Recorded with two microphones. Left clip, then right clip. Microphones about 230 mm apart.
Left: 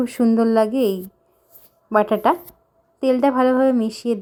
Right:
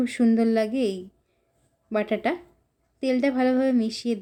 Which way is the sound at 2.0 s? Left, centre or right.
Centre.